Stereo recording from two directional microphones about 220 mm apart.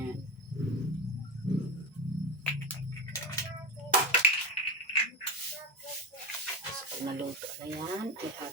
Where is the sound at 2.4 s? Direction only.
10° left (ahead or behind).